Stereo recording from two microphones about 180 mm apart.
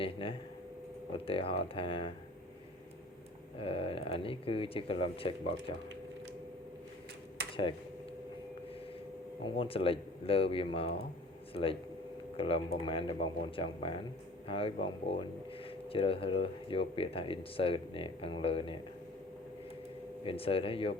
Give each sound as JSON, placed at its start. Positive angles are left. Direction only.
{"t": 0.0, "sound": "speech", "side_deg": 30}
{"t": 3.6, "sound": "speech", "side_deg": 30}
{"t": 9.4, "sound": "speech", "side_deg": 30}
{"t": 20.2, "sound": "speech", "side_deg": 30}